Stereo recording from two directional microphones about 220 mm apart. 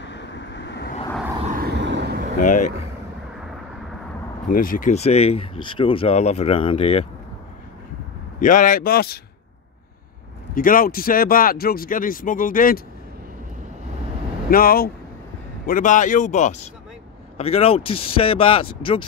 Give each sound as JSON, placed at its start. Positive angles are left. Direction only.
{"t": 0.0, "sound": "vehicle", "side_deg": 55}
{"t": 1.4, "sound": "vehicle", "side_deg": -40}
{"t": 2.3, "sound": "speech", "side_deg": 35}
{"t": 4.5, "sound": "speech", "side_deg": 40}
{"t": 8.4, "sound": "speech", "side_deg": 35}
{"t": 10.5, "sound": "speech", "side_deg": 40}
{"t": 14.5, "sound": "speech", "side_deg": 40}